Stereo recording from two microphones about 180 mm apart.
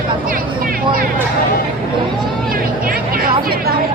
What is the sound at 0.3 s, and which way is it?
Music, 50° right (ahead or behind).